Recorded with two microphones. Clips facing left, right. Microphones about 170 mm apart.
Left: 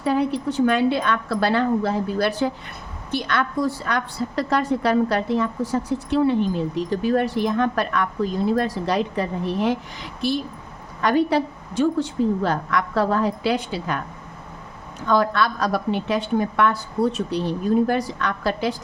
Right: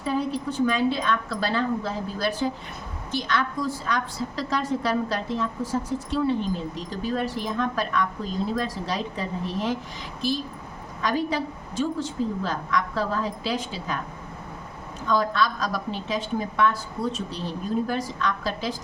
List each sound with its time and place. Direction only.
0.0 s a woman's voice: 65° left (ahead or behind)
15.0 s a woman's voice: 65° left (ahead or behind)